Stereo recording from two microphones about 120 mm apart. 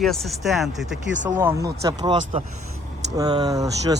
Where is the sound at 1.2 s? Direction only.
20° right (ahead or behind).